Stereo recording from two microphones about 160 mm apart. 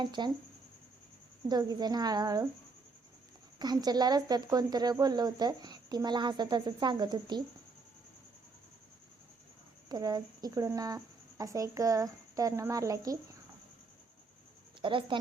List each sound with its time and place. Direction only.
0.0 s speech: 30° right (ahead or behind)
1.5 s speech: 25° right (ahead or behind)
3.6 s speech: 25° right (ahead or behind)
9.9 s speech: 25° right (ahead or behind)
14.8 s a woman's voice: 30° right (ahead or behind)